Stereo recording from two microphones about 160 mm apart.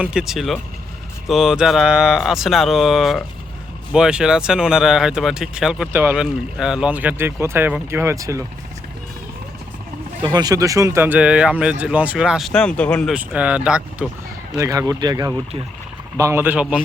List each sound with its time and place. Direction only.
0.0 s speech: 5° right (ahead or behind)
10.2 s speech: 25° right (ahead or behind); by 13.1 s 5° left (ahead or behind)
13.1 s speech: 5° right (ahead or behind)
14.6 s speech: 20° right (ahead or behind)